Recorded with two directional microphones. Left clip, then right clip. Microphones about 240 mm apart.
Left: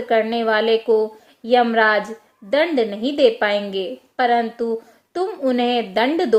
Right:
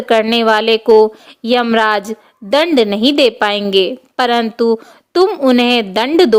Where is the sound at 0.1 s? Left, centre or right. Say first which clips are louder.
Right 7 dB; right.